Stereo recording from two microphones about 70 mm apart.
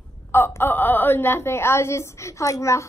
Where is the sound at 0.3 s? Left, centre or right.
Left.